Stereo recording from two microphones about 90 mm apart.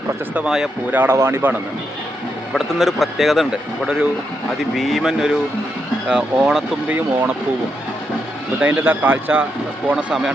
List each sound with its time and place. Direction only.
0.3 s speech: 5° right (ahead or behind)
0.9 s speech: 20° right (ahead or behind)
2.5 s speech: centre (ahead or behind)
4.7 s speech: centre (ahead or behind)
6.8 s speech: 15° right (ahead or behind)
8.6 s speech: 20° right (ahead or behind)
9.9 s speech: 10° right (ahead or behind)